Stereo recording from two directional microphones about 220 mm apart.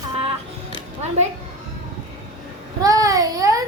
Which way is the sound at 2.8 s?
15° right (ahead or behind).